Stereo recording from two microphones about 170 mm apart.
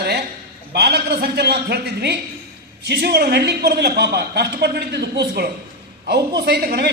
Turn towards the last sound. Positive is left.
turn(degrees=-65)  # may be behind; listen again after turning